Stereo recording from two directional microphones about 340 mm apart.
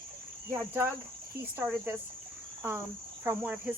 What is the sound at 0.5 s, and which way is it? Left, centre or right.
Cricket, centre.